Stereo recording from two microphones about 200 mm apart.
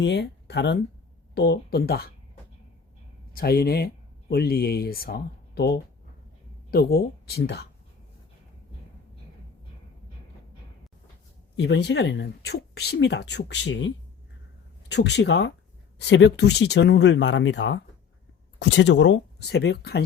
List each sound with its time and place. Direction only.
0.0 s speech: 60° left (ahead or behind)
3.3 s speech: 50° left (ahead or behind)
11.5 s speech: 55° left (ahead or behind)